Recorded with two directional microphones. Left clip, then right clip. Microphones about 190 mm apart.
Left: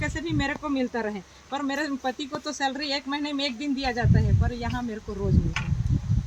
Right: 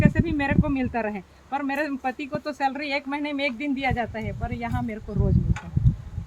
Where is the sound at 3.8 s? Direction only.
5° right (ahead or behind).